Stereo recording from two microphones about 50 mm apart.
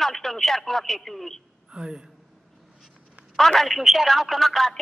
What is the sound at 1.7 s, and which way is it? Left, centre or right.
Speech, centre.